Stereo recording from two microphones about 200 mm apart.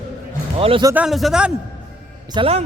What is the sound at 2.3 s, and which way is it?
Speech, 30° right (ahead or behind).